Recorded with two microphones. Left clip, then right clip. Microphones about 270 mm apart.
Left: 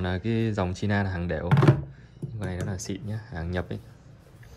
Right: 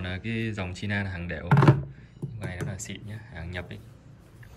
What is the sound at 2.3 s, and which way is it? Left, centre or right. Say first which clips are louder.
Speech: left 3 dB; centre.